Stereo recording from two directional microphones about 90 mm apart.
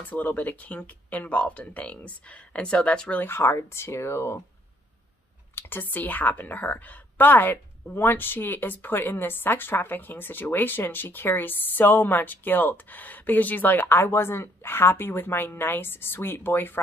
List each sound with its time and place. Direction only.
0.0 s speech: 20° left (ahead or behind)
5.5 s a woman's voice: 25° left (ahead or behind)